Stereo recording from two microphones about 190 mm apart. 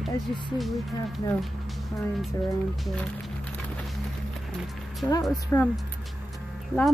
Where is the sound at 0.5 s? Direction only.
Centre (ahead or behind).